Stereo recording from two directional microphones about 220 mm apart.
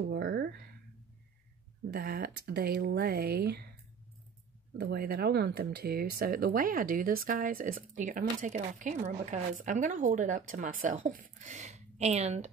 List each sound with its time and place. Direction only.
0.1 s speech: 45° right (ahead or behind)
1.9 s speech: 45° right (ahead or behind)
4.7 s speech: 45° right (ahead or behind); by 12.4 s 30° right (ahead or behind)